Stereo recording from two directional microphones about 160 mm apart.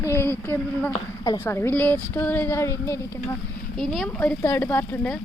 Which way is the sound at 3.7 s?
Centre (ahead or behind).